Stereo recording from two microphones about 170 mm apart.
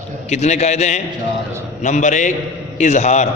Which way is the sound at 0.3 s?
40° left (ahead or behind).